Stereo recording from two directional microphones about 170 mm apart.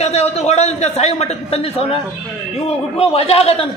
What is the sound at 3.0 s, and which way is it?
Speech, 35° left (ahead or behind).